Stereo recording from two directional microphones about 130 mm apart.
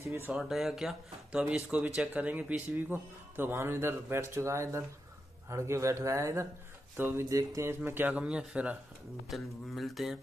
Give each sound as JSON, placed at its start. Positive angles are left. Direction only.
{"t": 0.0, "sound": "speech", "side_deg": -20}
{"t": 0.3, "sound": "speech", "side_deg": 0}